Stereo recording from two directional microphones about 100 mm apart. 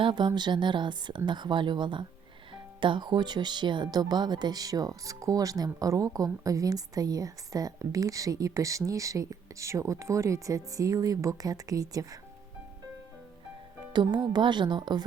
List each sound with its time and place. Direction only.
0.0 s a woman's voice: 50° right (ahead or behind); by 12.2 s 35° right (ahead or behind)
13.9 s a woman's voice: 45° right (ahead or behind)